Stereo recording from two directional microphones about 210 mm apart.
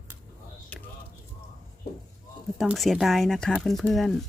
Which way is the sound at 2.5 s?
Centre (ahead or behind).